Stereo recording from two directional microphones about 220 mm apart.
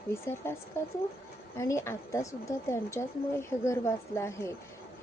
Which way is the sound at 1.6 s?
15° left (ahead or behind).